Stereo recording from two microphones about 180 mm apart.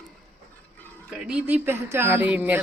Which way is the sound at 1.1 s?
5° right (ahead or behind).